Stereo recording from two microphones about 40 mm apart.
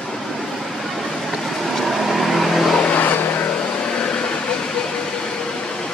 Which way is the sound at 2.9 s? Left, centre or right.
Left.